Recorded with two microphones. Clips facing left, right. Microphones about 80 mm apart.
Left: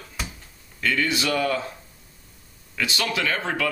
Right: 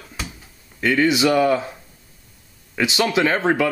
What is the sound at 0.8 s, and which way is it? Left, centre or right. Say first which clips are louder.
Speech: right 7 dB; right.